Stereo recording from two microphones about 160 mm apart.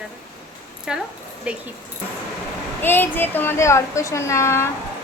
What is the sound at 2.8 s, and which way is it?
Speech, 15° left (ahead or behind).